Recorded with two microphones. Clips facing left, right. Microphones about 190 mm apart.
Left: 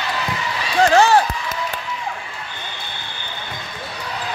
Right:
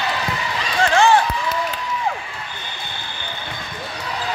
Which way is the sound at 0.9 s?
40° left (ahead or behind).